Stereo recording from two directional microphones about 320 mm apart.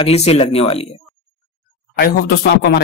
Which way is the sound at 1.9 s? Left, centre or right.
Left.